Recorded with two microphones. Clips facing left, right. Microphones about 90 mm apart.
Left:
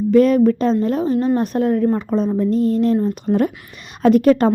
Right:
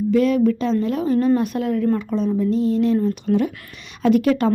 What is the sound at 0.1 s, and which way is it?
A woman's voice, 45° left (ahead or behind).